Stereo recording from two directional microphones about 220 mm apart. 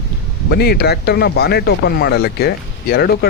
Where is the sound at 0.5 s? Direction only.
45° left (ahead or behind).